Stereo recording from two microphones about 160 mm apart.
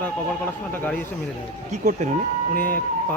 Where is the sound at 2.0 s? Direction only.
45° right (ahead or behind).